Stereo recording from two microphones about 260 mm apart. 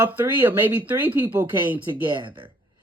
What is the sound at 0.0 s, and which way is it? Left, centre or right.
Speech, centre.